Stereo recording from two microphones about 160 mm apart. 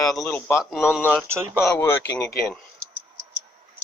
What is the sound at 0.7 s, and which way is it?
Speech, 5° right (ahead or behind).